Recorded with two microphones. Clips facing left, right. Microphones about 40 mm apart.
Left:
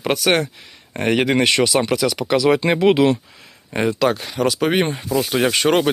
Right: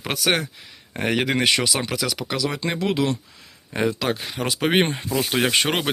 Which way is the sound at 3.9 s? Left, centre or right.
Centre.